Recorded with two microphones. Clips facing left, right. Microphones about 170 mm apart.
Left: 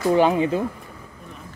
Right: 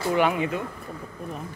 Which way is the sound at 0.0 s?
30° left (ahead or behind).